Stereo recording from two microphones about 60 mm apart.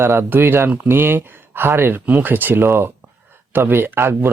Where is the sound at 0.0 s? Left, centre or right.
Right.